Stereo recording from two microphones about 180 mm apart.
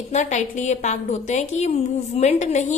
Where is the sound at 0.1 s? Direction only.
40° left (ahead or behind).